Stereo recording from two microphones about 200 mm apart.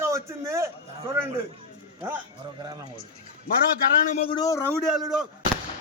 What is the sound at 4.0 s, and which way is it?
Speech, 40° left (ahead or behind).